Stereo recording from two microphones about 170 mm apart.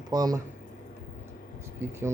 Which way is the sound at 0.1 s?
20° right (ahead or behind).